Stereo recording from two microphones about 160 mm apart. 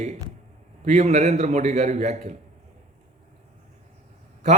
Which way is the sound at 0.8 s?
45° right (ahead or behind).